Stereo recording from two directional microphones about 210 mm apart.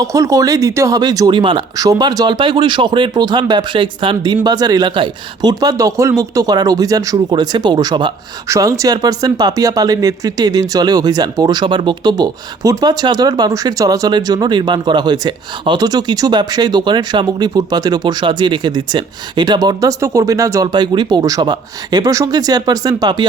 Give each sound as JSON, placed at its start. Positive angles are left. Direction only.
{"t": 0.0, "sound": "speech", "side_deg": -15}